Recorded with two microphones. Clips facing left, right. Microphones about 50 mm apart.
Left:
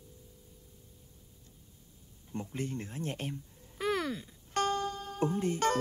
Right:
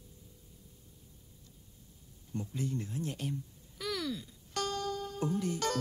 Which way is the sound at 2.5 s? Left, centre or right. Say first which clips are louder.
Right 1 dB; left.